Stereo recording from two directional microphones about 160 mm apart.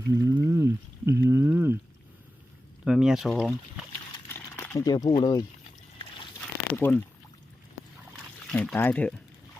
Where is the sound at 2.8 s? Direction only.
5° right (ahead or behind).